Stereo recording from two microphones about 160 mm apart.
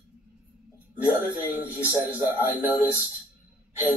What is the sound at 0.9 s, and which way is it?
A man's voice, 10° right (ahead or behind).